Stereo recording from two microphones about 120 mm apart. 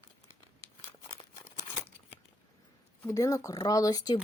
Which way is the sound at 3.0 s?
25° left (ahead or behind).